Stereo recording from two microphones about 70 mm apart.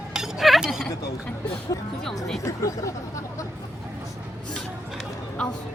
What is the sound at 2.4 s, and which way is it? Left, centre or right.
Speech, left.